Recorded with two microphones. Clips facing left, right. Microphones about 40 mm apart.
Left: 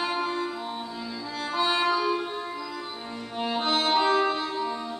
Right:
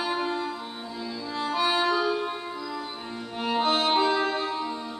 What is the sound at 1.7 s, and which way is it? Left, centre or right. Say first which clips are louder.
Music: left 1 dB; left.